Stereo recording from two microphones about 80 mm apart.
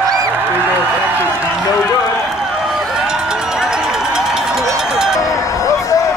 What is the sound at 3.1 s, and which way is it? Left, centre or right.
Run, centre.